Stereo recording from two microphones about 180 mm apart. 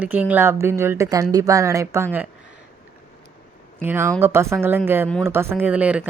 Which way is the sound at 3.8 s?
10° right (ahead or behind).